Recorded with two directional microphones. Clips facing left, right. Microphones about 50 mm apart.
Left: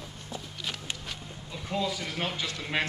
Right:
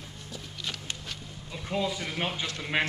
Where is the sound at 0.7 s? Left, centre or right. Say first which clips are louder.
Left 1 dB; centre.